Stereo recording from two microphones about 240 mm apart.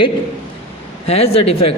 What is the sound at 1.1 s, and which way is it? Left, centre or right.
Speech, left.